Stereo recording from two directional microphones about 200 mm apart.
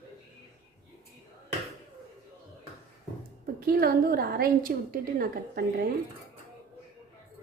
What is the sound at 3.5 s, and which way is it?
A woman's voice, 50° right (ahead or behind).